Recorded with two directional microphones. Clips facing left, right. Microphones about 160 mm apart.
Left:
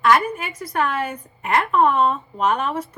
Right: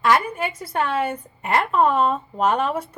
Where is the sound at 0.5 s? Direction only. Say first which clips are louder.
Left 1 dB; 25° right (ahead or behind).